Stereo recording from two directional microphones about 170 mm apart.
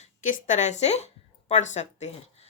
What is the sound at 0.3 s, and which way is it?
Speech, 50° left (ahead or behind).